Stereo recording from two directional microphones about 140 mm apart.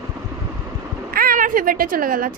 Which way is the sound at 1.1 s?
90° right.